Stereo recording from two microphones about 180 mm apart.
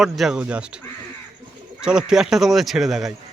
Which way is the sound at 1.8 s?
5° right (ahead or behind).